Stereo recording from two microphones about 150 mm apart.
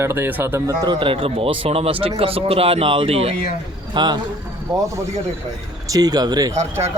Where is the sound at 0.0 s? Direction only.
15° right (ahead or behind); by 3.3 s 40° right (ahead or behind).